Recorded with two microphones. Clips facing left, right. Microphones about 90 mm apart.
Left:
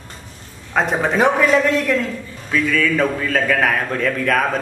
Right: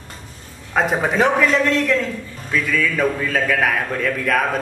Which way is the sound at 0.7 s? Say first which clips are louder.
Left 1 dB; centre (ahead or behind).